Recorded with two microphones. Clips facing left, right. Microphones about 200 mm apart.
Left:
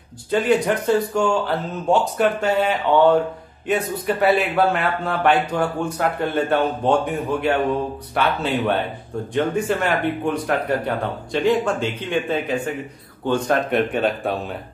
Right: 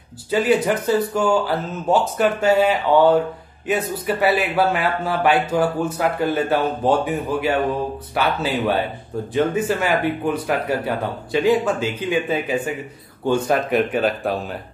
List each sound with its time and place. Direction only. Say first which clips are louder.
0.3 s speech: even; 5° right (ahead or behind)